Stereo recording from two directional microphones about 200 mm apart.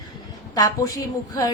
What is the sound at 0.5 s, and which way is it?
A woman's voice, 15° left (ahead or behind).